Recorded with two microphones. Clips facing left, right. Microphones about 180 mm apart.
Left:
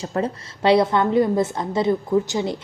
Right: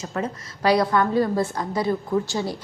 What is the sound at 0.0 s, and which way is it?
A woman's voice, 30° left (ahead or behind).